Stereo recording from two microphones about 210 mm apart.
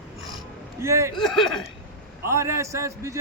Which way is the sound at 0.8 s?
15° right (ahead or behind).